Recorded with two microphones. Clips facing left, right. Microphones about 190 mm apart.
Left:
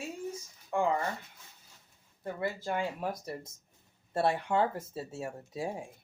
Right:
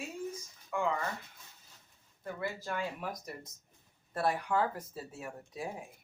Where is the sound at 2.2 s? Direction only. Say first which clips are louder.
Left 4 dB; 25° left (ahead or behind).